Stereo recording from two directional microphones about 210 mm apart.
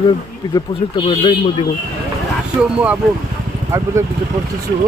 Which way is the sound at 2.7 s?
5° right (ahead or behind).